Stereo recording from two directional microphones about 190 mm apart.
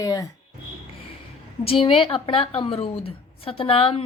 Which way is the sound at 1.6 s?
30° left (ahead or behind).